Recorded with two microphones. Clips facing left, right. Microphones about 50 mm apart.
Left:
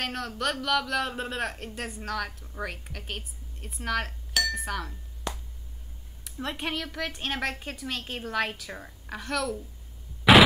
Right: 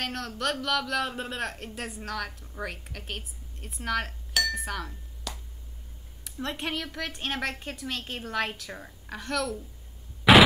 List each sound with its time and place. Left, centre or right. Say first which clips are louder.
0.0 s speech: left 1 dB; centre
5.3 s finger snapping: left 4 dB; left
6.4 s speech: even; centre
10.3 s a sound: even; centre